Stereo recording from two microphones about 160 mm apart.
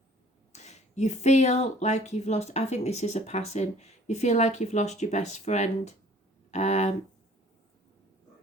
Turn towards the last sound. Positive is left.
turn(degrees=45)  # may be behind; listen again after turning